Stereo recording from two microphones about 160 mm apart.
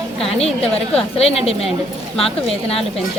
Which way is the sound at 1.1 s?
40° left (ahead or behind).